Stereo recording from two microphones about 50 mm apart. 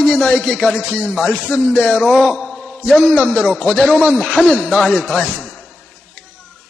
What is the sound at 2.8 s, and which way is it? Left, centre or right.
Speech, centre.